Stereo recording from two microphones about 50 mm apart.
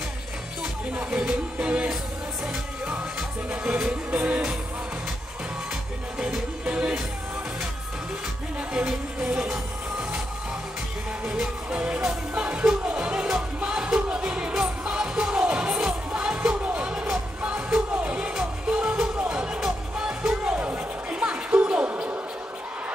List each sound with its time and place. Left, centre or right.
0.9 s music: right
3.4 s music: right
6.6 s music: right
8.5 s music: centre
11.2 s music: centre
11.7 s music: right
20.5 s music: right
21.6 s a sound: right